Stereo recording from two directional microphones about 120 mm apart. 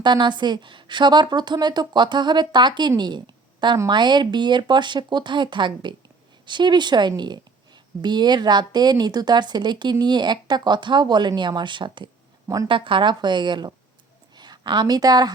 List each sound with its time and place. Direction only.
0.0 s a woman's voice: 40° right (ahead or behind)